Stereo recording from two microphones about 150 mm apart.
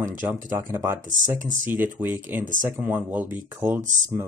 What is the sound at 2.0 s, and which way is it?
Speech, 15° right (ahead or behind).